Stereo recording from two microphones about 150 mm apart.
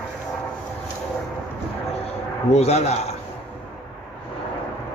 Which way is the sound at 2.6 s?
45° left (ahead or behind).